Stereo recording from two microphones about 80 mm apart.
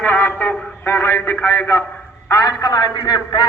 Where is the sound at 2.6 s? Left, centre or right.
Left.